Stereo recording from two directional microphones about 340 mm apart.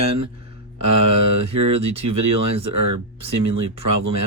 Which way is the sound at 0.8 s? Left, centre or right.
Right.